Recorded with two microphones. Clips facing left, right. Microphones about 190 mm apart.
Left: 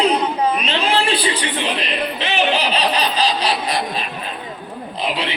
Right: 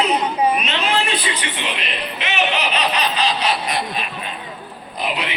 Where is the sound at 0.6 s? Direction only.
30° left (ahead or behind).